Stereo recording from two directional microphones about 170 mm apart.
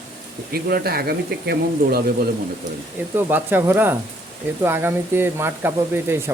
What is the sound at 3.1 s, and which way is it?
Speech, 10° right (ahead or behind).